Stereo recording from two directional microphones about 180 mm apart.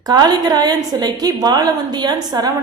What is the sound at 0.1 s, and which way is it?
A woman's voice, 20° right (ahead or behind).